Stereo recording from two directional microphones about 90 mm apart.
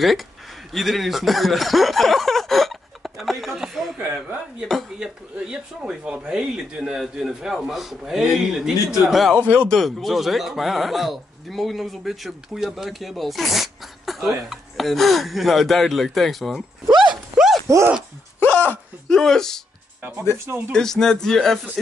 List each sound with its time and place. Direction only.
0.0 s speech: centre (ahead or behind)
4.9 s speech: 10° right (ahead or behind)
9.3 s speech: 15° right (ahead or behind)
9.7 s speech: centre (ahead or behind)
16.8 s a sound: 55° right (ahead or behind)
17.1 s a sound: 5° right (ahead or behind)
17.6 s speech: 35° right (ahead or behind)
18.5 s a sound: 20° left (ahead or behind)
19.0 s speech: 5° left (ahead or behind)
20.3 s speech: 30° right (ahead or behind)
20.7 s a man's voice: 5° left (ahead or behind)